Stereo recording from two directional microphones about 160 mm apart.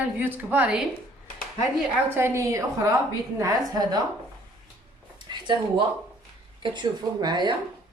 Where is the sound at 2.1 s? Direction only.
15° right (ahead or behind).